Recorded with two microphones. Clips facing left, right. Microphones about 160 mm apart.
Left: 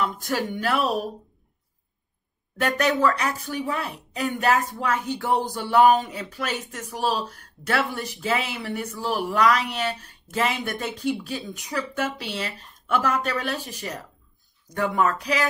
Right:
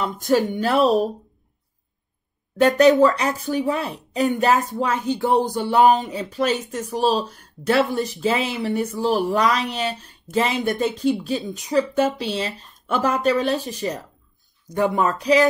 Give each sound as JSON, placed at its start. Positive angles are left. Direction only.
{"t": 0.0, "sound": "speech", "side_deg": -25}
{"t": 2.6, "sound": "speech", "side_deg": -25}